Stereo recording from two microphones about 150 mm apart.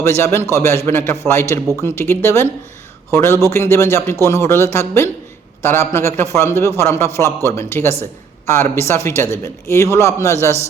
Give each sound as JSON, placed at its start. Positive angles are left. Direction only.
{"t": 0.0, "sound": "speech", "side_deg": 15}